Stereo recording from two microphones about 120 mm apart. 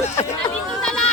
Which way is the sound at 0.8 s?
5° left (ahead or behind).